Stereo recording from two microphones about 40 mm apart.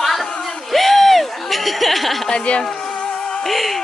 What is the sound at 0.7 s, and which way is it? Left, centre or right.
Speech, centre.